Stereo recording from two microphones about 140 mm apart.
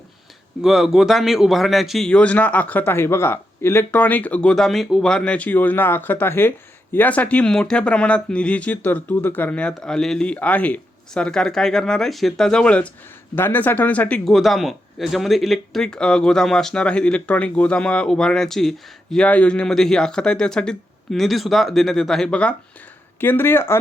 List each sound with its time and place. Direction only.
0.6 s speech: 5° right (ahead or behind); by 23.8 s 15° left (ahead or behind)